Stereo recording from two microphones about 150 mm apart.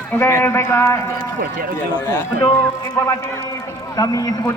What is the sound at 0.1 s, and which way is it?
Speech, 15° left (ahead or behind).